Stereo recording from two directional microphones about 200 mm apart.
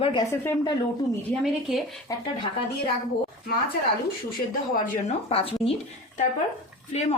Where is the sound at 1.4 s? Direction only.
Centre (ahead or behind).